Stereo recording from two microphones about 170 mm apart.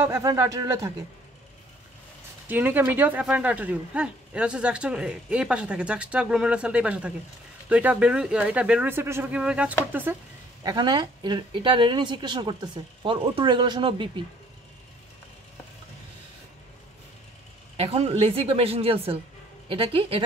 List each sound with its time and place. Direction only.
0.0 s speech: 20° right (ahead or behind)
2.4 s speech: 10° right (ahead or behind)
10.6 s speech: 25° right (ahead or behind)
17.7 s a woman's voice: 35° right (ahead or behind)